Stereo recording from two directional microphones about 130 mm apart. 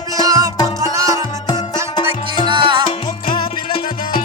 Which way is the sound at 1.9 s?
35° left (ahead or behind).